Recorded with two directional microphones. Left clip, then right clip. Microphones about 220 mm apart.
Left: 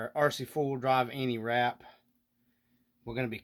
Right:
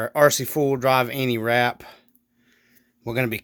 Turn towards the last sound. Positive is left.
turn(degrees=-50)  # may be behind; listen again after turning